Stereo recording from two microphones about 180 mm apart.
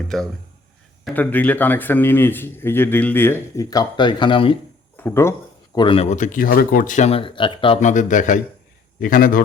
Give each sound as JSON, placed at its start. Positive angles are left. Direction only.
{"t": 0.1, "sound": "a man's voice", "side_deg": 0}
{"t": 4.9, "sound": "speech", "side_deg": 15}
{"t": 5.7, "sound": "speech", "side_deg": 30}
{"t": 7.8, "sound": "speech", "side_deg": 40}